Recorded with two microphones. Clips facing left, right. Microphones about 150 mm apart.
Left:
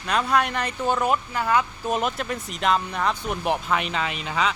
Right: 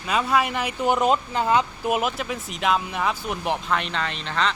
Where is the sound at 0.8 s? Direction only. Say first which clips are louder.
Right 3 dB; 20° right (ahead or behind).